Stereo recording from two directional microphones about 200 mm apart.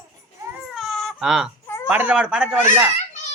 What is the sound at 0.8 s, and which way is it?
Baby cry, centre (ahead or behind).